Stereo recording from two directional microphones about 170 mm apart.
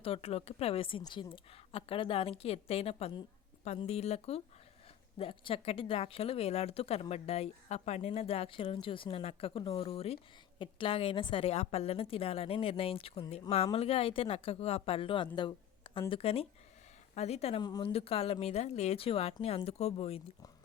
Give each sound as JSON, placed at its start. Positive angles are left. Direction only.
{"t": 0.0, "sound": "speech", "side_deg": 35}
{"t": 17.6, "sound": "speech", "side_deg": 25}
{"t": 17.9, "sound": "speech", "side_deg": 35}